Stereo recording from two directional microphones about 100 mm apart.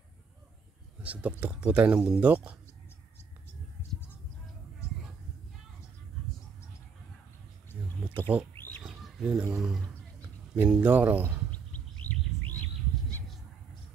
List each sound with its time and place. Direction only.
1.0 s speech: 15° right (ahead or behind)
4.8 s a sound: 30° left (ahead or behind)
8.3 s speech: 15° right (ahead or behind)
8.8 s bird: 5° right (ahead or behind)
9.6 s speech: 5° right (ahead or behind)
11.5 s bird: 15° left (ahead or behind)